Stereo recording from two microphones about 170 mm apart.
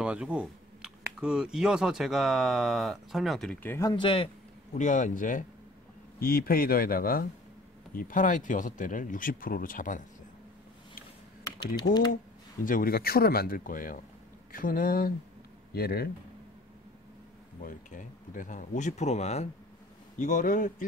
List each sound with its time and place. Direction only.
0.0 s speech: 5° right (ahead or behind); by 3.9 s 15° left (ahead or behind)
3.9 s a man's voice: 30° left (ahead or behind)
4.7 s speech: 50° left (ahead or behind)
6.1 s speech: 60° left (ahead or behind)
11.6 s speech: 25° left (ahead or behind)
12.6 s speech: 55° left (ahead or behind)
17.6 s speech: 50° left (ahead or behind)
20.2 s speech: 50° left (ahead or behind)